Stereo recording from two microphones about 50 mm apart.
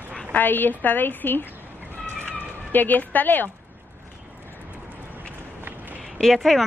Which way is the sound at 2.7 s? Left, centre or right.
Left.